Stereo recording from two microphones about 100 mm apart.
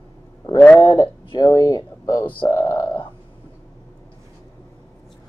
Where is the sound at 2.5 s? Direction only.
30° left (ahead or behind).